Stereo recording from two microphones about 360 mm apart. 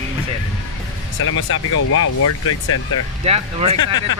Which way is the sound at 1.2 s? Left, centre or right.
Left.